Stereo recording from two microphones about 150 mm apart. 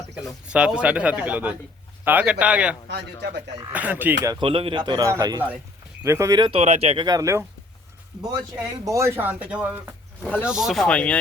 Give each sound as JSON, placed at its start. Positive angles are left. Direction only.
{"t": 0.4, "sound": "speech", "side_deg": -5}
{"t": 4.4, "sound": "speech", "side_deg": -35}
{"t": 6.5, "sound": "speech", "side_deg": -45}
{"t": 7.0, "sound": "speech", "side_deg": -25}